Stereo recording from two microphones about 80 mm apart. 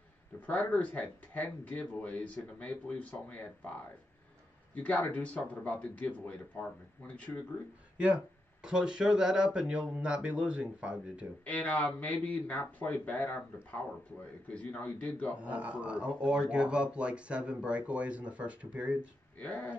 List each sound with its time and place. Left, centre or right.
0.5 s speech: centre
4.7 s speech: centre
8.6 s speech: centre
11.4 s speech: centre
14.5 s a man's voice: centre
15.3 s speech: centre
19.4 s speech: left